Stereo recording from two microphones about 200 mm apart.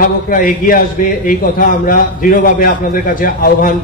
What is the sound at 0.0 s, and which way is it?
A man's voice, 45° left (ahead or behind).